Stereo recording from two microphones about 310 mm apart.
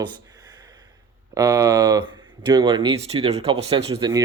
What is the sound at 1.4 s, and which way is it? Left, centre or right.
Speech, centre.